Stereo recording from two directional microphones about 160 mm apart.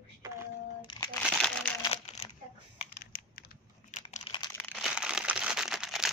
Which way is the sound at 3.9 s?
50° left (ahead or behind).